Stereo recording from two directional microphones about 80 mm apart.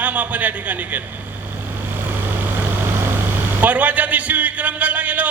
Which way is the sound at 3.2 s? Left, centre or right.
Right.